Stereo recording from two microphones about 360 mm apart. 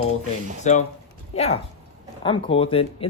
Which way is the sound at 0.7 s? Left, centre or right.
Centre.